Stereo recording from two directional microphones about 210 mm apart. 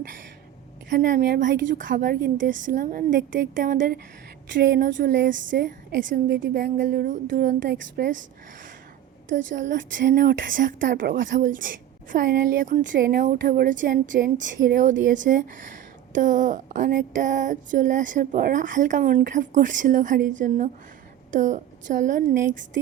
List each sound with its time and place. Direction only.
0.9 s a woman's voice: 40° right (ahead or behind); by 5.3 s 60° right (ahead or behind)
5.5 s a woman's voice: 50° right (ahead or behind)
6.5 s a woman's voice: 40° right (ahead or behind)
9.3 s a woman's voice: 35° right (ahead or behind); by 11.3 s 55° right (ahead or behind)
11.3 s a woman's voice: 40° right (ahead or behind)
21.3 s a woman's voice: 35° right (ahead or behind)